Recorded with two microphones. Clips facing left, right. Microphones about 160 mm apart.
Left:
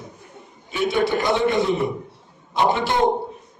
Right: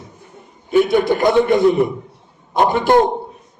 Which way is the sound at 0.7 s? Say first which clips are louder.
Right 7 dB; 50° right (ahead or behind).